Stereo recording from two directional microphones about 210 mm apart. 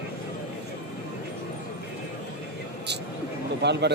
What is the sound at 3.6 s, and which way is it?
Speech, 55° right (ahead or behind).